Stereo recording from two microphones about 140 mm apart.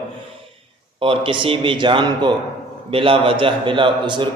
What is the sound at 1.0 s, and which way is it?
A man's voice, 40° right (ahead or behind).